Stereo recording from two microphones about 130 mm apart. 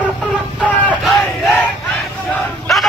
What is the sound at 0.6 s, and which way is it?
Vehicle, 10° left (ahead or behind).